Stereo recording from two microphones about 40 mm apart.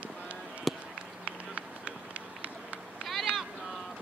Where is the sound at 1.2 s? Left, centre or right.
Right.